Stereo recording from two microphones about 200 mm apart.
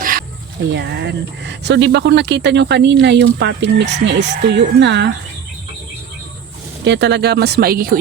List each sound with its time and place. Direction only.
0.0 s music: 45° right (ahead or behind)
0.7 s speech: 55° right (ahead or behind)
6.8 s speech: 60° right (ahead or behind)